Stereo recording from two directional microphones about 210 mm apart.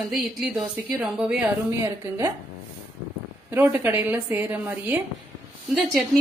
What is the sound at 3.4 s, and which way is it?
A woman's voice, 10° right (ahead or behind).